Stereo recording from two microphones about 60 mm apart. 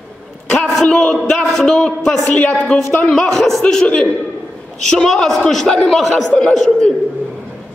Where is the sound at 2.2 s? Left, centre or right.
Left; by 6.1 s centre.